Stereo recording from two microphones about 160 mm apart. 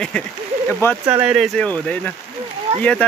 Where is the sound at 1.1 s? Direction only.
10° right (ahead or behind); by 2.1 s 10° left (ahead or behind).